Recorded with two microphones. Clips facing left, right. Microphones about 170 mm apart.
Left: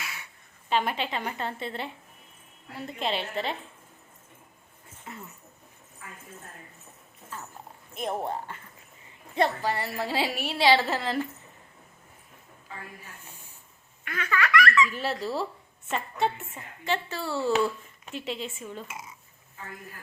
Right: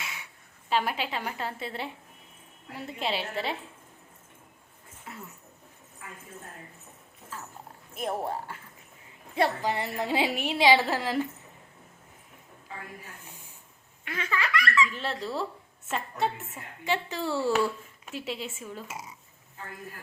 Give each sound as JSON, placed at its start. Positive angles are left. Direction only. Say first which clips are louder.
{"t": 0.0, "sound": "a sound", "louder": "even", "side_deg": -15}
{"t": 0.7, "sound": "a woman's voice", "louder": "left 1 dB", "side_deg": -5}
{"t": 5.1, "sound": "dog", "louder": "left 1 dB", "side_deg": -5}
{"t": 7.3, "sound": "dog", "louder": "left 1 dB", "side_deg": 0}
{"t": 7.9, "sound": "a woman's voice", "louder": "even", "side_deg": -5}
{"t": 14.0, "sound": "baby laughter", "louder": "left 2 dB", "side_deg": -25}
{"t": 14.8, "sound": "a woman's voice", "louder": "left 3 dB", "side_deg": 5}
{"t": 16.8, "sound": "speech", "louder": "right 1 dB", "side_deg": -15}
{"t": 18.9, "sound": "speech", "louder": "right 1 dB", "side_deg": -40}